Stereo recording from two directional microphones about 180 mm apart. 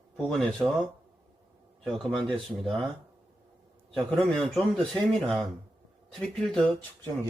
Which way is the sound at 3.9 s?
Centre (ahead or behind).